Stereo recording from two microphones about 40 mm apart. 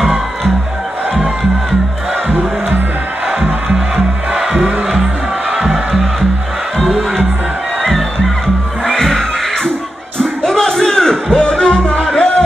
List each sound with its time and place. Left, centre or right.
8.8 s music: centre
10.4 s music: centre